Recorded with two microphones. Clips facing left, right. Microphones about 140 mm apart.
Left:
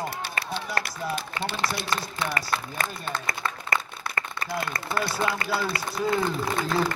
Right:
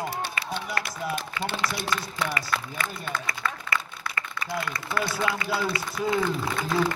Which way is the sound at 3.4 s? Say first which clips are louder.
Right 2 dB; 30° left (ahead or behind).